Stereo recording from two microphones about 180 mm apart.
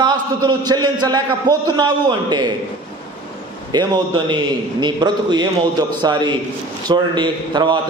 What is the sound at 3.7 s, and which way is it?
A man's voice, 25° right (ahead or behind).